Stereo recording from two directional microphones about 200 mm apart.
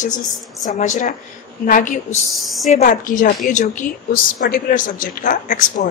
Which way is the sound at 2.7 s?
40° left (ahead or behind).